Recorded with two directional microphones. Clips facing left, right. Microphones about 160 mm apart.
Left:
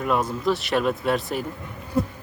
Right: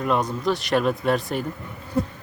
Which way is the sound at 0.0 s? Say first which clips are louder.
Even; 5° left (ahead or behind).